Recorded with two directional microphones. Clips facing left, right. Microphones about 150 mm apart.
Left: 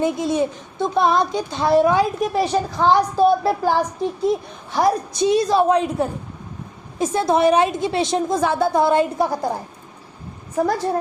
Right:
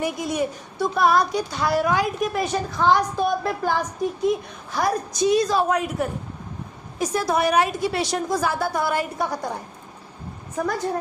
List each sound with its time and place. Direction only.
0.0 s speech: 25° left (ahead or behind)